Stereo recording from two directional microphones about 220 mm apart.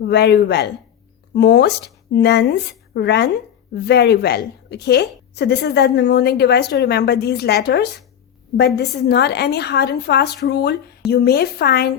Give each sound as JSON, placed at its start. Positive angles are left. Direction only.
{"t": 0.0, "sound": "a woman's voice", "side_deg": 50}